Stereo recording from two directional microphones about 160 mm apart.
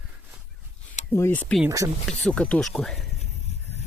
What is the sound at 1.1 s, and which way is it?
Speech, 15° left (ahead or behind).